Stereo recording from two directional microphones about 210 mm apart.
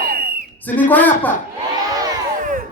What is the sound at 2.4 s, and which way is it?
Music, 40° right (ahead or behind).